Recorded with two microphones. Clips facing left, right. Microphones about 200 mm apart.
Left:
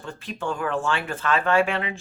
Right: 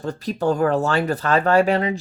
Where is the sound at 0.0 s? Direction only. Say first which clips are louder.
Right 9 dB; 40° right (ahead or behind).